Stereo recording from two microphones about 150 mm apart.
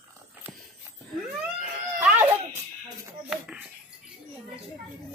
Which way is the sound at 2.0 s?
10° right (ahead or behind).